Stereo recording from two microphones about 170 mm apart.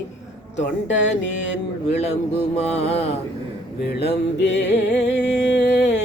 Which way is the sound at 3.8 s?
75° left (ahead or behind).